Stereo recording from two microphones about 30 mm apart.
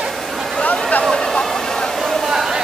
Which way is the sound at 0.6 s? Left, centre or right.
Left.